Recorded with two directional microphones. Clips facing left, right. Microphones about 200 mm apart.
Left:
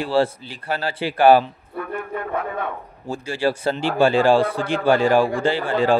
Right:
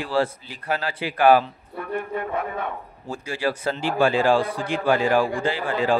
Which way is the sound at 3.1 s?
30° left (ahead or behind).